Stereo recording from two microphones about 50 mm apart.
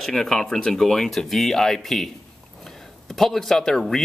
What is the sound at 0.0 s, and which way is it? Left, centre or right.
Speech, centre.